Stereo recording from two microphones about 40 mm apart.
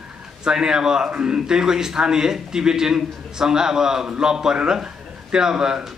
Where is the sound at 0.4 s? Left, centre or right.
Centre.